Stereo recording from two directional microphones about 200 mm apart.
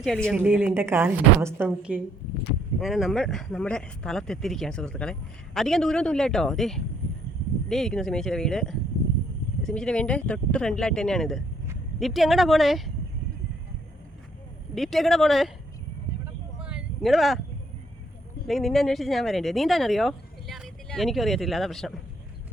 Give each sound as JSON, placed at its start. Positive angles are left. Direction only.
{"t": 0.3, "sound": "a woman's voice", "side_deg": -5}
{"t": 14.8, "sound": "speech", "side_deg": 0}
{"t": 16.2, "sound": "vehicle", "side_deg": -5}
{"t": 18.4, "sound": "speech", "side_deg": 0}